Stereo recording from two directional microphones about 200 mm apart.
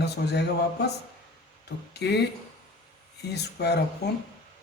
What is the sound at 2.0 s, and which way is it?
Speech, 55° left (ahead or behind).